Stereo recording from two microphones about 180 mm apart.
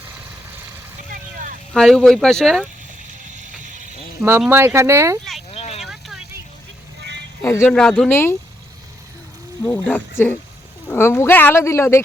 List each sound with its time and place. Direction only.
1.1 s vehicle: 45° right (ahead or behind)
1.7 s speech: centre (ahead or behind)
4.2 s speech: 15° right (ahead or behind)
5.5 s vehicle: 35° left (ahead or behind)
5.8 s vehicle: centre (ahead or behind)
7.0 s vehicle: 75° right (ahead or behind)
7.4 s speech: 15° left (ahead or behind)
7.7 s speech: 5° left (ahead or behind)
9.6 s speech: 10° left (ahead or behind)